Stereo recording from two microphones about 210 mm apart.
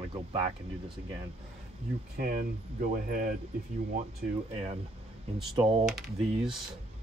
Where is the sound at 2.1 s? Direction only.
40° right (ahead or behind).